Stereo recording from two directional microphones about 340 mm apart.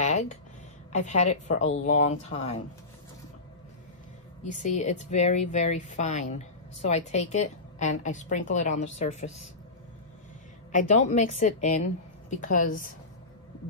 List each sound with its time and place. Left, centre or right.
0.0 s a sound: left
0.9 s a woman's voice: centre
4.5 s a woman's voice: left
10.7 s a woman's voice: left